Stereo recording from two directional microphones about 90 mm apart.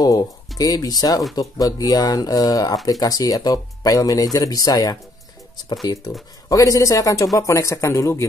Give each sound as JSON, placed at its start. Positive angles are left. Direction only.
{"t": 0.0, "sound": "speech", "side_deg": 45}
{"t": 6.5, "sound": "speech", "side_deg": 35}